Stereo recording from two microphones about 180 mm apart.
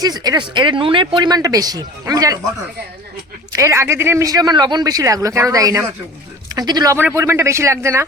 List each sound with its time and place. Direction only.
0.0 s speech: 20° right (ahead or behind)
3.5 s speech: 15° right (ahead or behind)